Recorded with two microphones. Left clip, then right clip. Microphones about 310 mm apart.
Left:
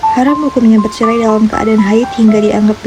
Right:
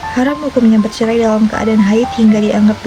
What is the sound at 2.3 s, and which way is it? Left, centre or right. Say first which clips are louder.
Speech: left 3 dB; centre.